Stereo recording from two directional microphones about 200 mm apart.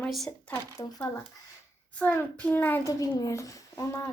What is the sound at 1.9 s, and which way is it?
Speech, 5° left (ahead or behind).